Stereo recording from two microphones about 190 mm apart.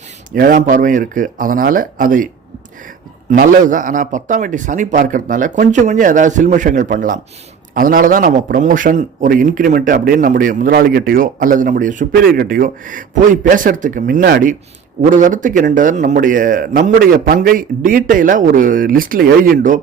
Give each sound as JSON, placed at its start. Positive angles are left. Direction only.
{"t": 0.3, "sound": "a man's voice", "side_deg": -45}
{"t": 3.3, "sound": "a man's voice", "side_deg": -45}